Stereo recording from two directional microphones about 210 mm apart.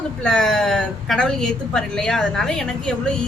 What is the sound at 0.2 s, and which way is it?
Speech, 5° left (ahead or behind).